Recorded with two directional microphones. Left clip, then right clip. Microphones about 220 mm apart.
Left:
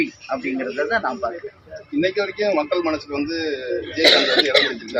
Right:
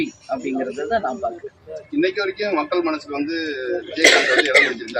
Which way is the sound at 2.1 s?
40° left (ahead or behind).